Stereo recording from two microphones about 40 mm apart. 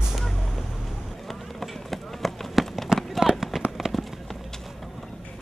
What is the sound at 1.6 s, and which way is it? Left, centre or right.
Run, centre.